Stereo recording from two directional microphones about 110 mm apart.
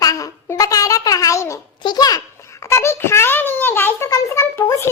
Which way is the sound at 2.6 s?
25° left (ahead or behind).